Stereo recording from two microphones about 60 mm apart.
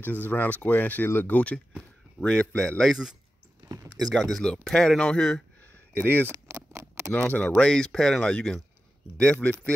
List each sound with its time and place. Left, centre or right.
0.0 s speech: left
2.1 s speech: centre
3.6 s a sound: right
4.1 s speech: centre
5.9 s speech: left
6.2 s a sound: right
7.1 s speech: left